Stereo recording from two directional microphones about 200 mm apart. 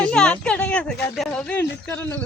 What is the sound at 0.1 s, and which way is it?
Speech, 5° left (ahead or behind).